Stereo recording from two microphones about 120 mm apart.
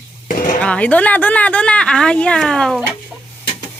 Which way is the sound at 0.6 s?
10° left (ahead or behind).